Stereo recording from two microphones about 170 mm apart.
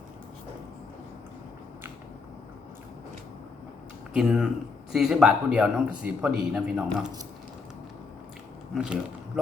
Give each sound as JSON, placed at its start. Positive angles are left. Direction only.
{"t": 4.1, "sound": "a man's voice", "side_deg": -5}
{"t": 6.8, "sound": "speech", "side_deg": -25}
{"t": 8.7, "sound": "speech", "side_deg": -5}